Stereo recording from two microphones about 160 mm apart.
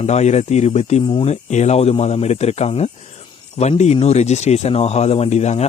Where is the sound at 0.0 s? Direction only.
45° left (ahead or behind).